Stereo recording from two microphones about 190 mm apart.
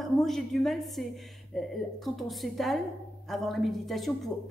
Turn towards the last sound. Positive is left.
turn(degrees=0)  # may be behind; listen again after turning